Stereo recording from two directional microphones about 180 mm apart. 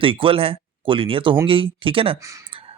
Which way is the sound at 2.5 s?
30° right (ahead or behind).